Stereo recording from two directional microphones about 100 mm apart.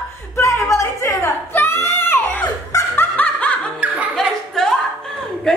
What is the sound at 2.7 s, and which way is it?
Snicker, 35° left (ahead or behind).